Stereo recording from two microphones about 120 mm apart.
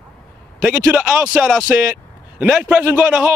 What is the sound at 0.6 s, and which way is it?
A man's voice, 10° right (ahead or behind).